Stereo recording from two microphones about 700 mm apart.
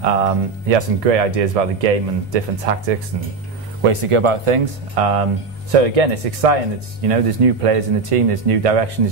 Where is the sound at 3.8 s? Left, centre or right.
Right.